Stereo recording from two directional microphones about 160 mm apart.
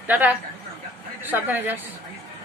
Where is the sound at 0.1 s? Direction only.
10° right (ahead or behind).